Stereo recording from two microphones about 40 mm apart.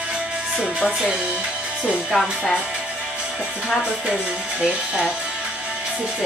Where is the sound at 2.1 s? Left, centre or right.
Centre.